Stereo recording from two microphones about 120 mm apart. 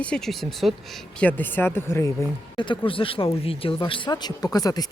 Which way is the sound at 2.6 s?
45° left (ahead or behind).